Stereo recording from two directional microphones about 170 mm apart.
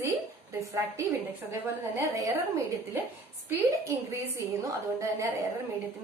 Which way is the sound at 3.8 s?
20° right (ahead or behind).